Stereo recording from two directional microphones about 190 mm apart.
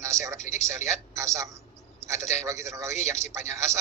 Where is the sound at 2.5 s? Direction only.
15° right (ahead or behind).